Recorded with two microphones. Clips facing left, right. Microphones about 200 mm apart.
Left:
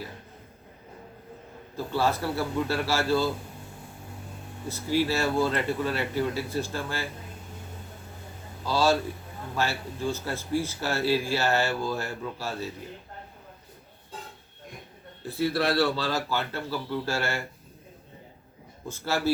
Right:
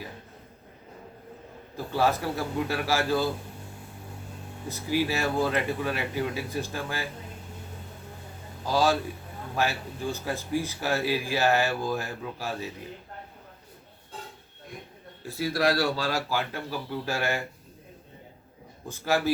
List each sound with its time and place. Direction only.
1.7 s a man's voice: 15° right (ahead or behind)
4.7 s speech: 15° right (ahead or behind)
8.6 s speech: 15° right (ahead or behind)
15.2 s speech: 10° right (ahead or behind)
18.9 s speech: 15° right (ahead or behind)